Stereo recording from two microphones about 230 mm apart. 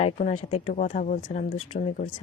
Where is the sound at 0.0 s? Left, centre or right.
Left.